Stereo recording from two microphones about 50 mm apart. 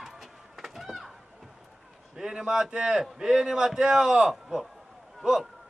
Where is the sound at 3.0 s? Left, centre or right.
Centre.